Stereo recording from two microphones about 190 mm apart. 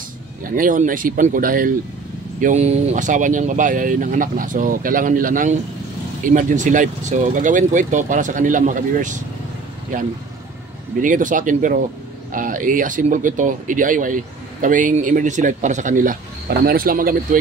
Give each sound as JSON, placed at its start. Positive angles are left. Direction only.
{"t": 0.4, "sound": "speech", "side_deg": -45}
{"t": 2.4, "sound": "speech", "side_deg": -35}
{"t": 11.0, "sound": "speech", "side_deg": -45}